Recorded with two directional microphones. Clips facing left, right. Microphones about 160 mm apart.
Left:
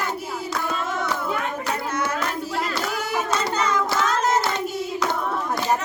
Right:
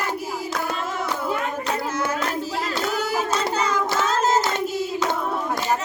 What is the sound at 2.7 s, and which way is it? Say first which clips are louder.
Hands: right 2 dB; 30° right (ahead or behind).